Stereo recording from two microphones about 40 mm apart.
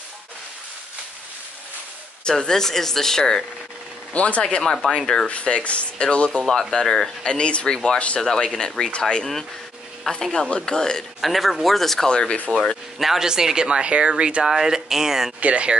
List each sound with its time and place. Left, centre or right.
2.2 s speech: centre
4.1 s speech: left
4.4 s speech: left
5.3 s speech: left
6.4 s speech: centre
6.7 s speech: centre
11.1 s speech: centre
12.1 s speech: left
13.0 s speech: centre
13.3 s speech: centre
14.5 s speech: centre
15.4 s speech: right